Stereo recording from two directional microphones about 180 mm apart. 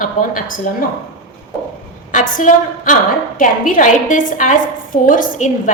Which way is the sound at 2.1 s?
45° left (ahead or behind).